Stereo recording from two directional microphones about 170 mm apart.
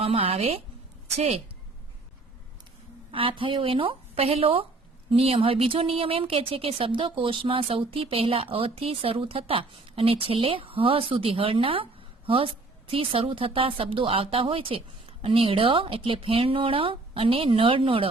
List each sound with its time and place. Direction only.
0.0 s a sound: 35° right (ahead or behind)
1.1 s a woman's voice: 40° right (ahead or behind)
3.1 s speech: 30° right (ahead or behind)